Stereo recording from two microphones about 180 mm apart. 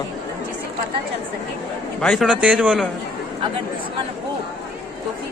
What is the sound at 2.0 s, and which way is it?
Speech, centre (ahead or behind).